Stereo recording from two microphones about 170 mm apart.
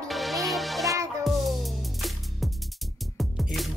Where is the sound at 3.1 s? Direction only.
Centre (ahead or behind).